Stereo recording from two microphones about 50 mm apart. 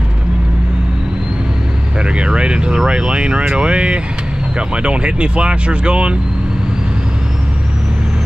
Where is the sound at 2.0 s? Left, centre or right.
Right.